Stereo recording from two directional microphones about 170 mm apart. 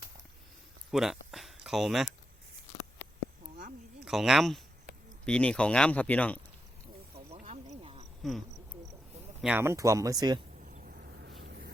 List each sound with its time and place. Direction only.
0.9 s a sound: centre (ahead or behind)
4.0 s speech: centre (ahead or behind)
7.3 s snake: 45° right (ahead or behind)
8.2 s cricket: centre (ahead or behind)
9.4 s speech: 10° right (ahead or behind)
10.6 s a sound: 50° right (ahead or behind); by 11.7 s 70° right (ahead or behind)